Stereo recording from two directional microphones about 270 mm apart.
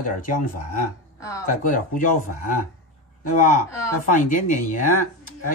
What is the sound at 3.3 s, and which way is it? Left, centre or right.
Speech, left.